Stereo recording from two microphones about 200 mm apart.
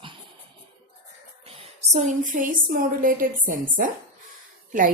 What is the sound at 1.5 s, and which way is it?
A woman's voice, 30° right (ahead or behind).